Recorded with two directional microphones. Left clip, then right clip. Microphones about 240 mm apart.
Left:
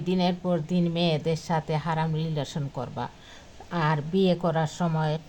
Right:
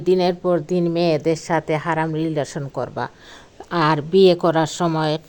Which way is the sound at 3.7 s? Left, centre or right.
Right.